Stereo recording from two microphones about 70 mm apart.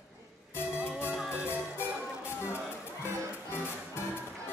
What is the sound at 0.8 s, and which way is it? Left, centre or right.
Music, left.